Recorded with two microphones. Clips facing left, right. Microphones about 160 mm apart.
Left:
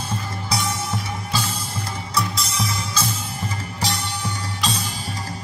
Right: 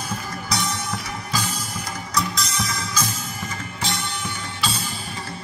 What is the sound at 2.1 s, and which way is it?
Music, 30° left (ahead or behind).